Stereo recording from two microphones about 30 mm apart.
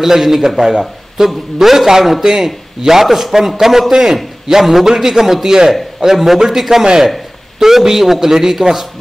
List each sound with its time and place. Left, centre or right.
0.0 s a man's voice: centre
2.2 s a man's voice: right
4.6 s a man's voice: centre
4.8 s a man's voice: centre